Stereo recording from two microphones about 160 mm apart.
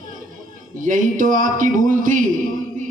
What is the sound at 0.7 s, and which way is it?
A man's voice, 55° right (ahead or behind).